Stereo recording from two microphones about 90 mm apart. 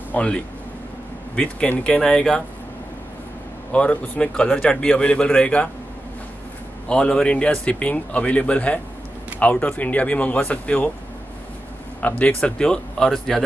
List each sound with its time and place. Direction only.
0.1 s speech: 15° left (ahead or behind)
3.7 s speech: 10° left (ahead or behind)
6.9 s speech: 10° left (ahead or behind)
12.0 s speech: 15° left (ahead or behind)